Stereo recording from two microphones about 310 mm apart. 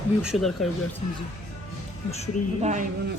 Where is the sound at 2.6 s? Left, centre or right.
Right.